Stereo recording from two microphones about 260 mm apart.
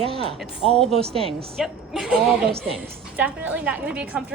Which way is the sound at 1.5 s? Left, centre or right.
Centre.